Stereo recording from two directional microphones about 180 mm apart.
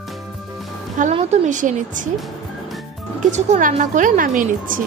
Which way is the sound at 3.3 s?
40° right (ahead or behind).